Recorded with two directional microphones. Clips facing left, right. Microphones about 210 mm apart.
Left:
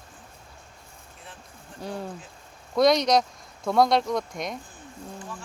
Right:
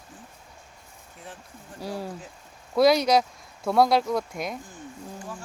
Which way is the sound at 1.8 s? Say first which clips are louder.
Right 1 dB; 5° right (ahead or behind).